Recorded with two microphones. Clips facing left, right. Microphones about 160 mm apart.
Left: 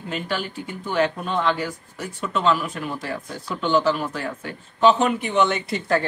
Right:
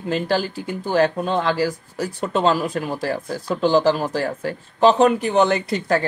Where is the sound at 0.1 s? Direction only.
35° right (ahead or behind).